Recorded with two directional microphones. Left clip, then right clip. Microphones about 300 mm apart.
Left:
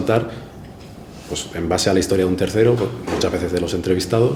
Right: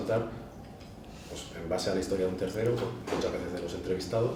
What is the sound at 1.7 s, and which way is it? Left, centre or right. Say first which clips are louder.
Speech: left 13 dB; left.